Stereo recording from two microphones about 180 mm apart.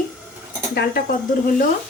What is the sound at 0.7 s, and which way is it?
Speech, 55° left (ahead or behind).